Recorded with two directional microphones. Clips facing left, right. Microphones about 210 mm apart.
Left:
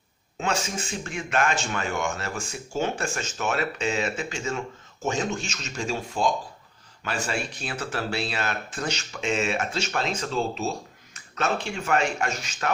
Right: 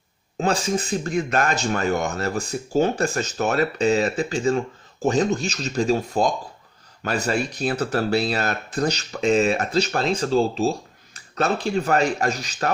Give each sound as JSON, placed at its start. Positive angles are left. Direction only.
{"t": 0.3, "sound": "speech", "side_deg": -35}